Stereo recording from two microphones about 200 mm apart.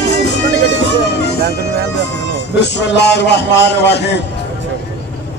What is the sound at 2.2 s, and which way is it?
A man's voice, 60° left (ahead or behind).